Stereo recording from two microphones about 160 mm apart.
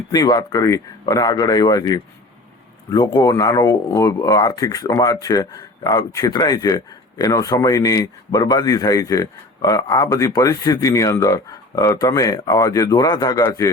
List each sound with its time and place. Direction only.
0.1 s speech: 25° left (ahead or behind)